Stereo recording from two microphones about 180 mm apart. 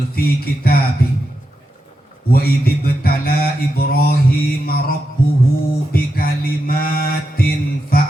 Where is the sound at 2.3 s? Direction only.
60° left (ahead or behind).